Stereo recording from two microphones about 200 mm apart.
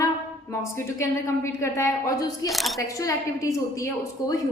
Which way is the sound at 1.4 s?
15° left (ahead or behind).